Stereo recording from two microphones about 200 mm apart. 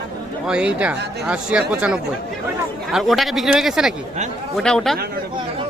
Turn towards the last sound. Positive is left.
turn(degrees=0)  # may be behind; listen again after turning